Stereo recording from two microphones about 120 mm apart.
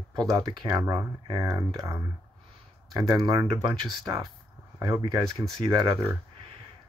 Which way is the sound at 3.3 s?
35° right (ahead or behind).